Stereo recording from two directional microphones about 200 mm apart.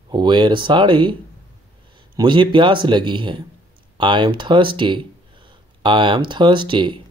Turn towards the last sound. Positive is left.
turn(degrees=-25)  # may be behind; listen again after turning